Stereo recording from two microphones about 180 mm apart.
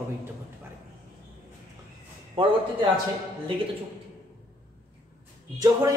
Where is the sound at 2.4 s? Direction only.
30° right (ahead or behind).